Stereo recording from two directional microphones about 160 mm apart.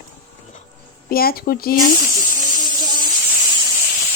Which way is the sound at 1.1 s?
70° left (ahead or behind).